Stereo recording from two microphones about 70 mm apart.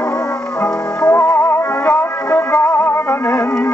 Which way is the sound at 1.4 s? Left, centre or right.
Left.